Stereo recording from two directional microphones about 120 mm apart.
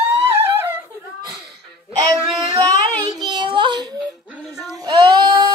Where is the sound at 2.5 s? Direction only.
35° right (ahead or behind).